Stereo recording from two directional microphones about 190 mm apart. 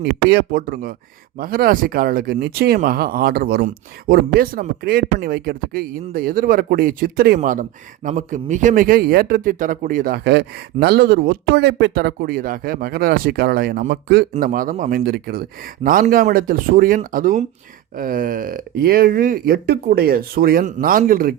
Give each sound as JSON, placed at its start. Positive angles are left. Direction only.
{"t": 0.0, "sound": "a man's voice", "side_deg": -60}